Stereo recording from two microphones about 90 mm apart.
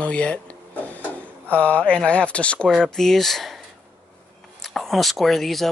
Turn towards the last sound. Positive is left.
turn(degrees=0)  # may be behind; listen again after turning